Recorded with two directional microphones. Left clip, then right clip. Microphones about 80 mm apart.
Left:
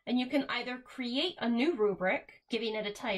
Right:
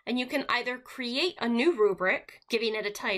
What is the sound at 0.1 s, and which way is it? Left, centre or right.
A woman's voice, centre.